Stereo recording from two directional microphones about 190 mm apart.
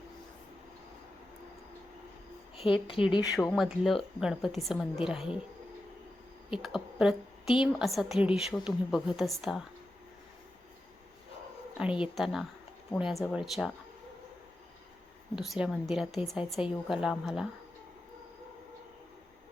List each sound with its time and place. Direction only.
2.6 s speech: 25° left (ahead or behind)
3.5 s a woman's voice: centre (ahead or behind)
6.6 s a woman's voice: centre (ahead or behind)
11.8 s a woman's voice: 5° right (ahead or behind)
15.4 s a woman's voice: 5° right (ahead or behind)